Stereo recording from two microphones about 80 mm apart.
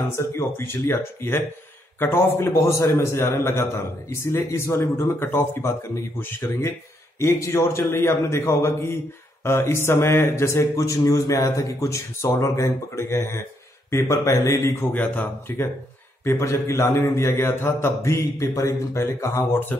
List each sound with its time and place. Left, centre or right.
0.1 s a man's voice: left
14.9 s a man's voice: centre